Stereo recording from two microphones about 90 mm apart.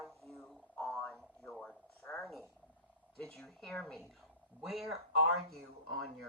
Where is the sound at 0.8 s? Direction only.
5° left (ahead or behind).